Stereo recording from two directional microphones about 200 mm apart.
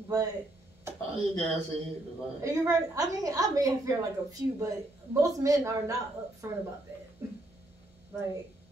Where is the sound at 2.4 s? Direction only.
15° right (ahead or behind).